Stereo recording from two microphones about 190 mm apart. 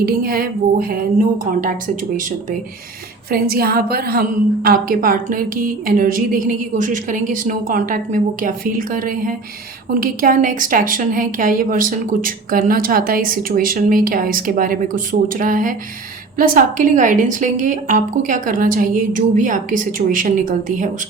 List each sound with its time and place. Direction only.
0.0 s a woman's voice: 50° right (ahead or behind)
3.2 s a woman's voice: 50° right (ahead or behind)